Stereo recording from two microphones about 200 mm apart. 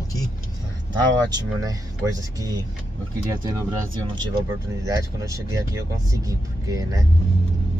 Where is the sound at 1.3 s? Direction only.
20° right (ahead or behind).